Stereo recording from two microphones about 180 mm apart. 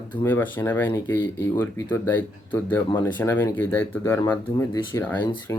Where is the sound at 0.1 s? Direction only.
10° left (ahead or behind).